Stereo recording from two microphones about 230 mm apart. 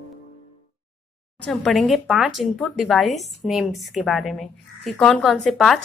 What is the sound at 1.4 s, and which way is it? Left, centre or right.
Speech, centre.